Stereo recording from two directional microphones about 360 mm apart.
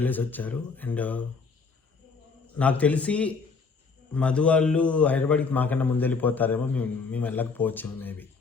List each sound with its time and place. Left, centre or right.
0.0 s a man's voice: centre
2.6 s a man's voice: centre